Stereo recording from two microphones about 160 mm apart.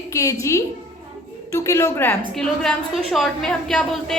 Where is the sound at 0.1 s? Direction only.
20° left (ahead or behind).